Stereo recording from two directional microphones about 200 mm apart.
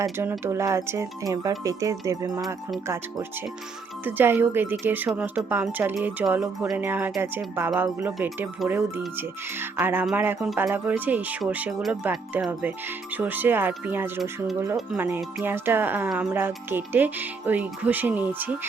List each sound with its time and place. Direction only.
0.0 s speech: 10° right (ahead or behind)